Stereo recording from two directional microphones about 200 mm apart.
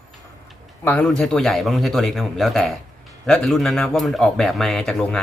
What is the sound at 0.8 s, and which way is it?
A man's voice, 5° left (ahead or behind).